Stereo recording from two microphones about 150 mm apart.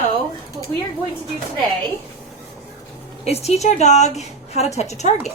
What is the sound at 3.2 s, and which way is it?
A woman's voice, 45° left (ahead or behind).